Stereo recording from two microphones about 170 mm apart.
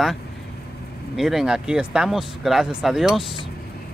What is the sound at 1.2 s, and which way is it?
Speech, centre (ahead or behind).